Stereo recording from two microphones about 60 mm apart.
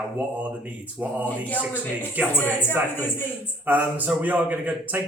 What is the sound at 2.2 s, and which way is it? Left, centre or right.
Speech, right.